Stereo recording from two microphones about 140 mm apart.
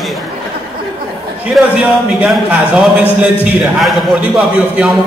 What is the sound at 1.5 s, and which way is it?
A man's voice, 5° right (ahead or behind).